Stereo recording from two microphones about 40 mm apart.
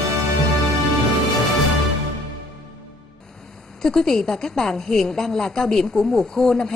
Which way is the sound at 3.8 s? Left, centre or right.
Centre.